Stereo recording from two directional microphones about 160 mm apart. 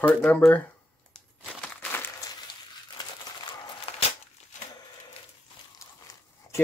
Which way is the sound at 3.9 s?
40° left (ahead or behind).